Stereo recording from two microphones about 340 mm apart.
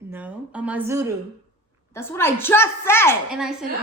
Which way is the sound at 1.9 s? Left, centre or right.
Centre.